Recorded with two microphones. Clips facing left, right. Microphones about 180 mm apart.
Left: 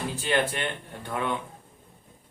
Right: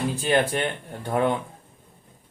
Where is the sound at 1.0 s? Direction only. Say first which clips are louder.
Right 8 dB; 40° right (ahead or behind).